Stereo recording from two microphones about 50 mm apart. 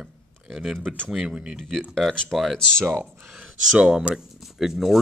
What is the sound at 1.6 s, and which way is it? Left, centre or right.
Speech, centre.